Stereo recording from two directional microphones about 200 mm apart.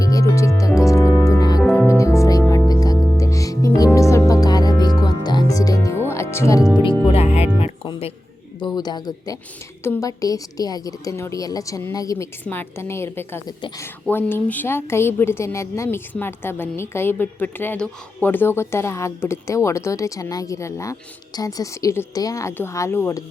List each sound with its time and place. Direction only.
0.0 s music: 15° left (ahead or behind)
1.6 s music: 5° left (ahead or behind)
2.1 s music: 15° left (ahead or behind)
7.1 s music: 30° left (ahead or behind)
8.6 s a woman's voice: 20° left (ahead or behind)